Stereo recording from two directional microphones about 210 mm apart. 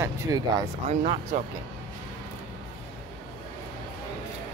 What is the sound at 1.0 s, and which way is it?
Speech, 40° right (ahead or behind).